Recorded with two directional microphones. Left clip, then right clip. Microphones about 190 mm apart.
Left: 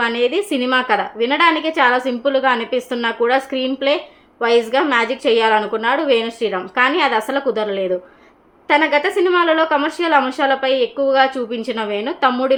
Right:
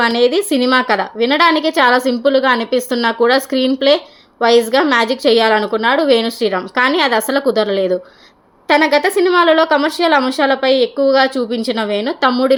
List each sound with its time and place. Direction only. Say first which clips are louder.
0.0 s speech: right 4 dB; 30° right (ahead or behind)